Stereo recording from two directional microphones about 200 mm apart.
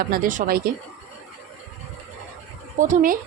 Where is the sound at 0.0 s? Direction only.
45° right (ahead or behind).